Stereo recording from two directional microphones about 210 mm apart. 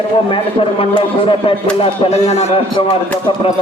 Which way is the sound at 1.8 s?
30° left (ahead or behind).